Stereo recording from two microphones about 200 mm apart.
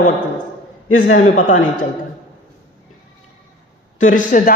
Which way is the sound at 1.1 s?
40° left (ahead or behind).